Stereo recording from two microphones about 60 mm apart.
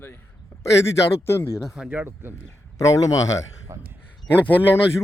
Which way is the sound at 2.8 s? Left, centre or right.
Left.